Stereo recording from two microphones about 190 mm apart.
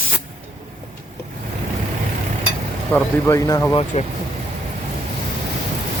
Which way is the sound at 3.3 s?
15° left (ahead or behind).